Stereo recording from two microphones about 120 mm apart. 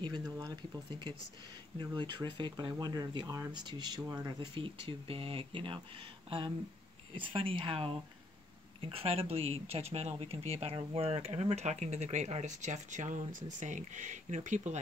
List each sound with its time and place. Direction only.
0.0 s speech: 35° right (ahead or behind)
1.8 s speech: 40° right (ahead or behind)
7.2 s speech: 45° right (ahead or behind); by 14.8 s 80° right